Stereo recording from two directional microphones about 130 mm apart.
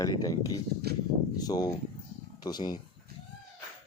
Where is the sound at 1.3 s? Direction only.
30° left (ahead or behind).